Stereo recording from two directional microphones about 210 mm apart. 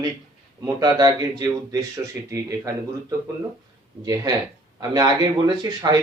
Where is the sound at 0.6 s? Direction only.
20° right (ahead or behind).